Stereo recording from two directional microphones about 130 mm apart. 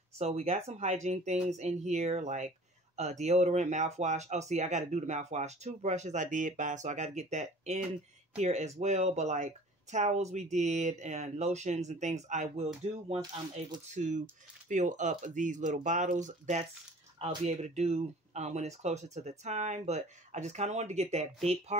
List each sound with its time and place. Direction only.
0.2 s speech: 55° right (ahead or behind)
13.9 s speech: 75° right (ahead or behind); by 21.3 s 55° right (ahead or behind)